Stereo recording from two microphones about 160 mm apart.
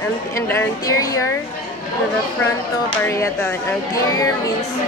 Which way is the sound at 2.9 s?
15° left (ahead or behind).